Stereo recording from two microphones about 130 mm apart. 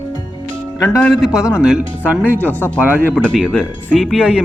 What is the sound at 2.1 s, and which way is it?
Speech, 15° right (ahead or behind).